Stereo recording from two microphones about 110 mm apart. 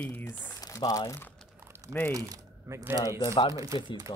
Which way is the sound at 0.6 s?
35° left (ahead or behind).